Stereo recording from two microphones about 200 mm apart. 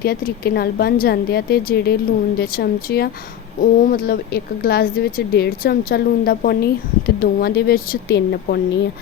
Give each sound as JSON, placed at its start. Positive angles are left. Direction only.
{"t": 0.0, "sound": "speech", "side_deg": 50}